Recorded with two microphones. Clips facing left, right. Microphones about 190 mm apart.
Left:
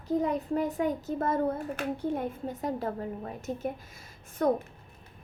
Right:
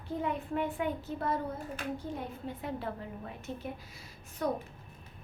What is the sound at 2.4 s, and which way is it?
A woman's voice, 40° left (ahead or behind).